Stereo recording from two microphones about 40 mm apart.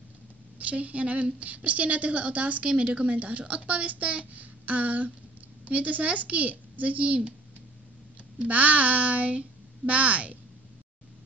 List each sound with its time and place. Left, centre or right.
0.6 s a child's voice: right
8.4 s a child's voice: right